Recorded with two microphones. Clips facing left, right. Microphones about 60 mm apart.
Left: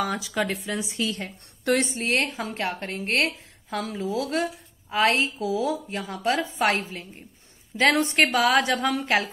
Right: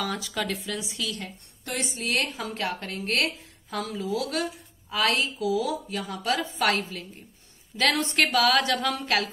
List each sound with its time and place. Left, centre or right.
0.3 s a woman's voice: left
1.6 s a woman's voice: left
1.9 s a woman's voice: left